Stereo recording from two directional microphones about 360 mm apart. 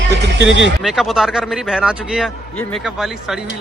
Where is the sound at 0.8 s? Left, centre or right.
Centre.